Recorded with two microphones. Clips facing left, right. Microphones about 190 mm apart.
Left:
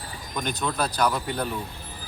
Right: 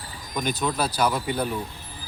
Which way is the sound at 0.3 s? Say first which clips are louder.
Right 2 dB; 5° right (ahead or behind).